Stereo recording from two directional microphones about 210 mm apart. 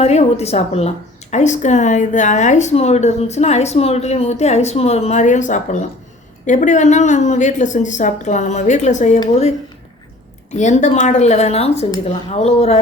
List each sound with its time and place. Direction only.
0.0 s a woman's voice: 30° left (ahead or behind)
10.5 s a woman's voice: 35° left (ahead or behind)